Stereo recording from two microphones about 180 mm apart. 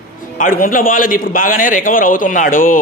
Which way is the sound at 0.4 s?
50° left (ahead or behind).